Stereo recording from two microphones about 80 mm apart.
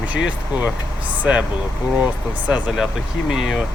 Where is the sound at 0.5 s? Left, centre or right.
Centre.